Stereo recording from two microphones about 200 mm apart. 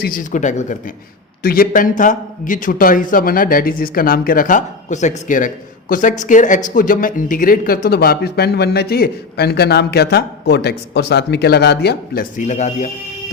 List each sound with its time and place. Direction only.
0.0 s speech: 45° left (ahead or behind)
12.4 s speech: 35° left (ahead or behind)